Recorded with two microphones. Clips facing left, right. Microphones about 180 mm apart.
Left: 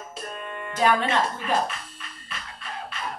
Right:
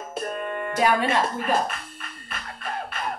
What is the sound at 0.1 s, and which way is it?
Music, 50° right (ahead or behind).